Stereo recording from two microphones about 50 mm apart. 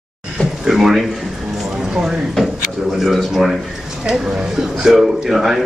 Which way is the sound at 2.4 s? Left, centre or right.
Centre.